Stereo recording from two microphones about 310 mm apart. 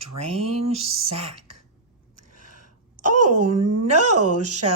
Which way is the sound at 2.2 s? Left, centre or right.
Right.